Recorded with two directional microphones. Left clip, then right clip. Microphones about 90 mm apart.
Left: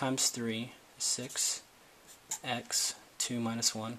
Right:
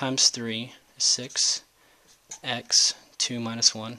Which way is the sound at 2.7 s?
30° right (ahead or behind).